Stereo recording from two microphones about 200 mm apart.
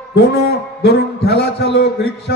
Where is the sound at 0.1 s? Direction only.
55° left (ahead or behind).